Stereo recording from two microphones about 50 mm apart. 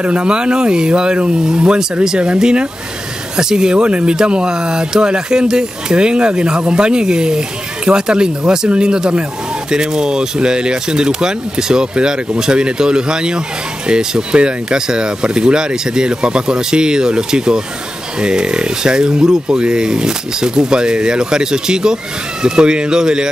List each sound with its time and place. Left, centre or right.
0.0 s speech: right